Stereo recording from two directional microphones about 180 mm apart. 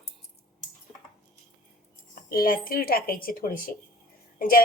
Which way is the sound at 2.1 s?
50° left (ahead or behind).